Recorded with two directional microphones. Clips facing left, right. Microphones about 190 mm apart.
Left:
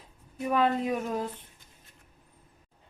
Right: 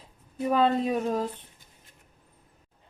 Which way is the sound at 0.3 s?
30° right (ahead or behind).